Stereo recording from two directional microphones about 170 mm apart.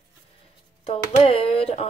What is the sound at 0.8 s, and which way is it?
A woman's voice, 35° left (ahead or behind).